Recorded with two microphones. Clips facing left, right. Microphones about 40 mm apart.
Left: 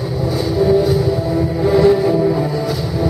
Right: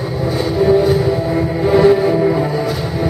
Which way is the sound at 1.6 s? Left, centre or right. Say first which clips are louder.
Right 1 dB; right.